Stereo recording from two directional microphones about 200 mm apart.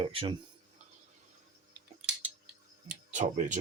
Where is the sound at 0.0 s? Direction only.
30° right (ahead or behind).